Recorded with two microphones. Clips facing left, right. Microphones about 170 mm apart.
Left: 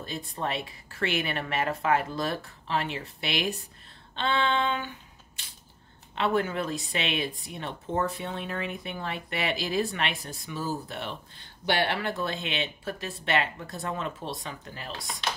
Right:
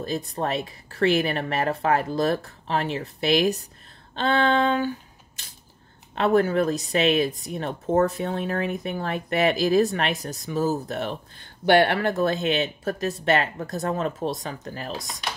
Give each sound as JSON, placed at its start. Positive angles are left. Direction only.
{"t": 0.0, "sound": "speech", "side_deg": -40}
{"t": 4.1, "sound": "a sound", "side_deg": -40}
{"t": 6.1, "sound": "speech", "side_deg": -45}
{"t": 11.6, "sound": "speech", "side_deg": -55}